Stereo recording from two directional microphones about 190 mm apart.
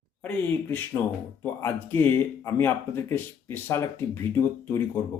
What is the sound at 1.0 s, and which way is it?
Speech, 5° left (ahead or behind).